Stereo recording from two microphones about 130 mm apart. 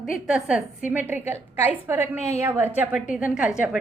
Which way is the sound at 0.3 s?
5° right (ahead or behind).